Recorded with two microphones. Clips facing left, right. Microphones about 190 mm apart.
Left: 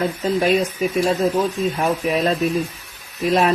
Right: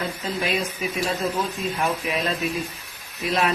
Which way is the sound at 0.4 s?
45° left (ahead or behind).